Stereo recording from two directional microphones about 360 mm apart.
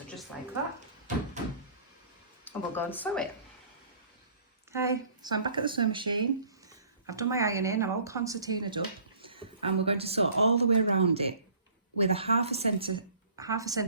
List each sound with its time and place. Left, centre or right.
2.5 s speech: centre
4.7 s speech: centre